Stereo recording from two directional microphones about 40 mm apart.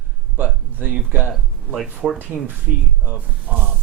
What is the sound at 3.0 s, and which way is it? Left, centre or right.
Speech, right.